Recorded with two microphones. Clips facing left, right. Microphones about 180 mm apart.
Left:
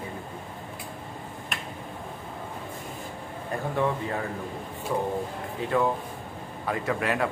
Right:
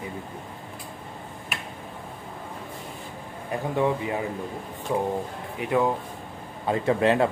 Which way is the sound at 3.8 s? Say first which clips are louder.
Right 3 dB; 15° right (ahead or behind).